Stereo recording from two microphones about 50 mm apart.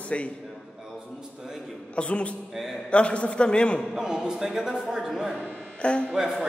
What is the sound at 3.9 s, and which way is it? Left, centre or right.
A man's voice, centre.